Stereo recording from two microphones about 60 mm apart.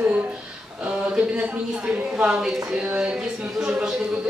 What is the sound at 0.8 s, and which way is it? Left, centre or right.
A woman's voice, centre.